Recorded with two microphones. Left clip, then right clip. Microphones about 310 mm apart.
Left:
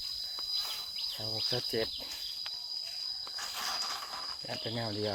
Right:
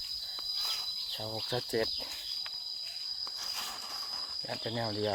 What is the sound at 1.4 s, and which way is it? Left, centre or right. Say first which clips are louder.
Speech: right 1 dB; centre.